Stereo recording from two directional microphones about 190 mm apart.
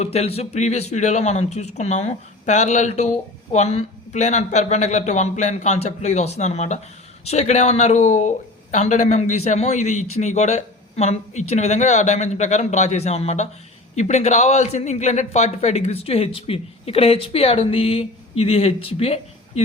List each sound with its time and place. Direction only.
0.0 s speech: 35° left (ahead or behind)